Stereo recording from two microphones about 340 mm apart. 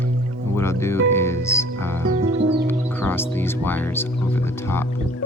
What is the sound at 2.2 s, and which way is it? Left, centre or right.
Music, centre.